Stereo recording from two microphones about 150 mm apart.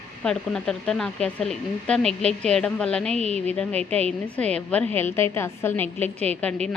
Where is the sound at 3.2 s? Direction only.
45° right (ahead or behind).